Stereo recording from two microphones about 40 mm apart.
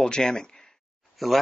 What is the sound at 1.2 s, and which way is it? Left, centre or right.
Speech, centre.